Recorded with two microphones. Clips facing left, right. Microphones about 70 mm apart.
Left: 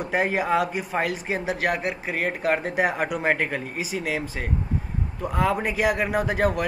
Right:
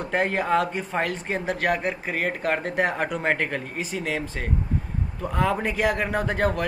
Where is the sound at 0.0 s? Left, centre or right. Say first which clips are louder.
Left 1 dB; centre.